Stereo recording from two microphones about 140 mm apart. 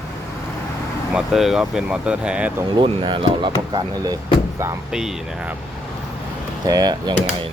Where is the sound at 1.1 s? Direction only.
Centre (ahead or behind).